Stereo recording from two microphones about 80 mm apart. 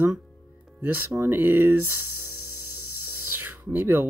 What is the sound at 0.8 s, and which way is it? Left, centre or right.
Speech, right.